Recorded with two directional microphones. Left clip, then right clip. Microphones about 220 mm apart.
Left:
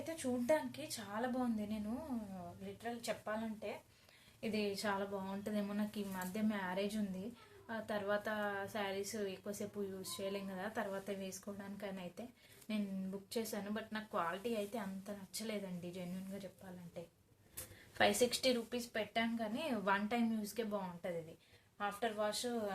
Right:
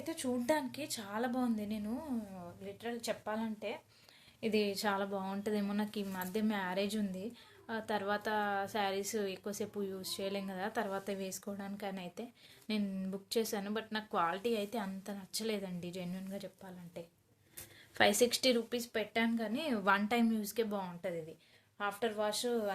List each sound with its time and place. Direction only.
0.0 s a woman's voice: 50° right (ahead or behind)
2.8 s a woman's voice: 40° right (ahead or behind)
17.9 s a woman's voice: 45° right (ahead or behind)